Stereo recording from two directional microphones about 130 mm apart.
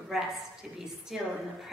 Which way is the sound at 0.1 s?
5° right (ahead or behind).